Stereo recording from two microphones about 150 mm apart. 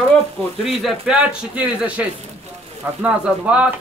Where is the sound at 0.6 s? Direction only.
5° right (ahead or behind).